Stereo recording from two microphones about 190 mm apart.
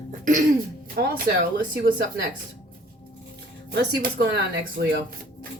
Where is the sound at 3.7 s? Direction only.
55° right (ahead or behind).